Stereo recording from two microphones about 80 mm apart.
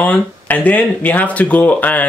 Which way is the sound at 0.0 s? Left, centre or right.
Centre.